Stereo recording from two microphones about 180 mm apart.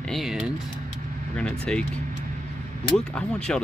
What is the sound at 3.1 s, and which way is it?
Speech, 5° left (ahead or behind).